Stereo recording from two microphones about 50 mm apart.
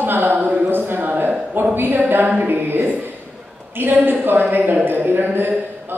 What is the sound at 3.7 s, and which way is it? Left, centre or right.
Speech, right.